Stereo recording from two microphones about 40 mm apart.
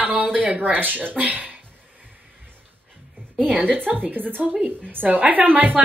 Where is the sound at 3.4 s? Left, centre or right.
Right.